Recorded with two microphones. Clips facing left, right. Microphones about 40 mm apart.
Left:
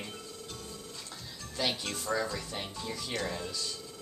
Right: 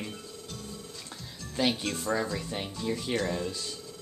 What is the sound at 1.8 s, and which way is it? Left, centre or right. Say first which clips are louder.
Speech: right 3 dB; centre.